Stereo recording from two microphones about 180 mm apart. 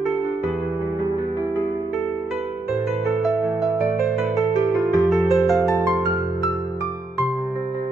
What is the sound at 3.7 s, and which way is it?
Music, 15° right (ahead or behind).